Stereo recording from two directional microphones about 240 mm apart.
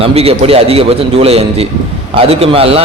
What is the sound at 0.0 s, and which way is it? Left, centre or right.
A man's voice, right.